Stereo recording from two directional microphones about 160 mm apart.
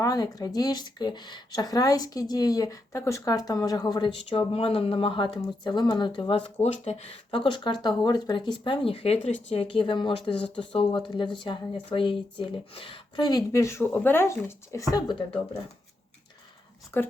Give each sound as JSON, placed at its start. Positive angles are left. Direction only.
{"t": 0.0, "sound": "a woman's voice", "side_deg": 20}
{"t": 16.9, "sound": "a woman's voice", "side_deg": 15}